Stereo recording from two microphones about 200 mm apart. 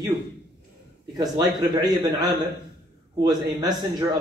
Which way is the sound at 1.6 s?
20° right (ahead or behind).